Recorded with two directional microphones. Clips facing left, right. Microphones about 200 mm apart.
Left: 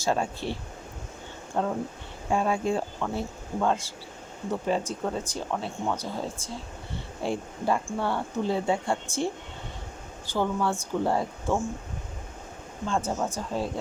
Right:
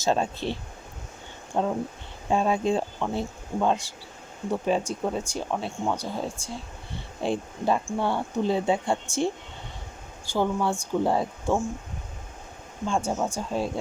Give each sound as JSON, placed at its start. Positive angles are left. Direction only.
{"t": 0.0, "sound": "speech", "side_deg": -20}
{"t": 1.6, "sound": "speech", "side_deg": -20}
{"t": 10.2, "sound": "speech", "side_deg": -15}
{"t": 12.8, "sound": "speech", "side_deg": -15}